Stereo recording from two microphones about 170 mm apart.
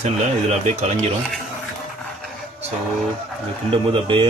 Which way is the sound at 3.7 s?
30° right (ahead or behind).